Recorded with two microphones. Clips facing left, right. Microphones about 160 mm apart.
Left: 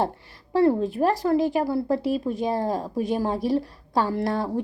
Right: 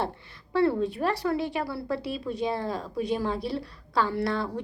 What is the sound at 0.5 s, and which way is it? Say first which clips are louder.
Speech: left 4 dB; 40° left (ahead or behind).